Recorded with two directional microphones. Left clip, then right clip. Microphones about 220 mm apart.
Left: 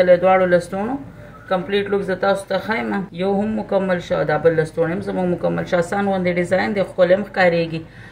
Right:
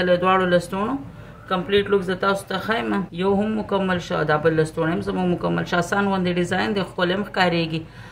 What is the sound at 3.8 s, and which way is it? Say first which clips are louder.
Speech: left 3 dB; 25° right (ahead or behind).